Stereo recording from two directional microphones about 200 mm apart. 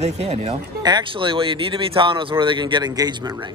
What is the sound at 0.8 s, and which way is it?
Speech, 25° right (ahead or behind).